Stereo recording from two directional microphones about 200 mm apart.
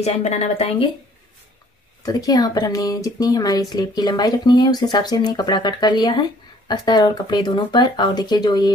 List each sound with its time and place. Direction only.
0.0 s a woman's voice: 35° left (ahead or behind)
2.0 s speech: 20° left (ahead or behind)